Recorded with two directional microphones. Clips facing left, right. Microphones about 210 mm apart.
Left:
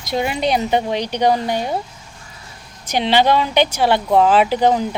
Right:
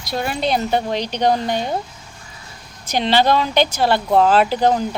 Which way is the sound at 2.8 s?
10° left (ahead or behind).